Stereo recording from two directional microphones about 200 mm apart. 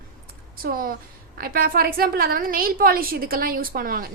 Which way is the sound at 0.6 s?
45° right (ahead or behind).